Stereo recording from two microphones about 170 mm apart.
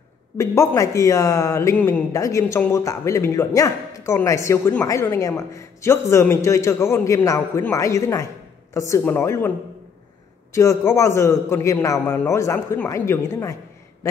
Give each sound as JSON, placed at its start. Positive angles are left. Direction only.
{"t": 0.4, "sound": "speech", "side_deg": 20}
{"t": 10.5, "sound": "speech", "side_deg": 15}